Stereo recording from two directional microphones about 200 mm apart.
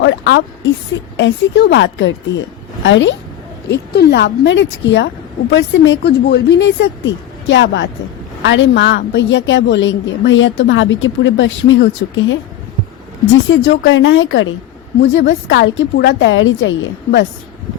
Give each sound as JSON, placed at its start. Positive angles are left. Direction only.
{"t": 0.0, "sound": "a woman's voice", "side_deg": 60}
{"t": 15.0, "sound": "a woman's voice", "side_deg": 65}